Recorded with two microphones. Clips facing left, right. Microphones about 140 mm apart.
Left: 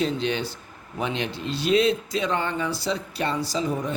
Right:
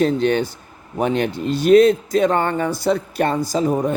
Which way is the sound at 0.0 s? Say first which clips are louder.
Right 8 dB; 50° right (ahead or behind).